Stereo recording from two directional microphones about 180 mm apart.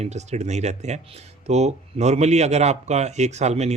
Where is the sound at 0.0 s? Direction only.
40° right (ahead or behind).